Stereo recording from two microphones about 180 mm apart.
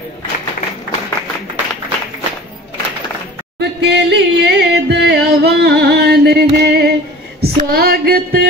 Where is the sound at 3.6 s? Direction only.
70° right (ahead or behind).